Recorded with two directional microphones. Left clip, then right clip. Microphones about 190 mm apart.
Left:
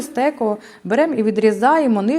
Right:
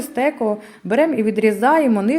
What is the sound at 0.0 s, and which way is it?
A woman's voice, 20° left (ahead or behind).